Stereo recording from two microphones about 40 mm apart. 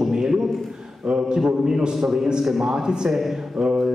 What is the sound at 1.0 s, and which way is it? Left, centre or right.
Speech, right.